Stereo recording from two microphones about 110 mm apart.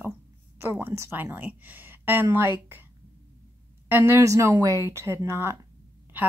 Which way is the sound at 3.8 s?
20° right (ahead or behind).